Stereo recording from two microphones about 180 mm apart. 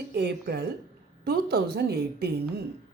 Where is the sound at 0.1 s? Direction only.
65° right (ahead or behind).